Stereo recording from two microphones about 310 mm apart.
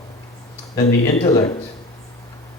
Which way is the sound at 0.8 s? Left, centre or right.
Centre.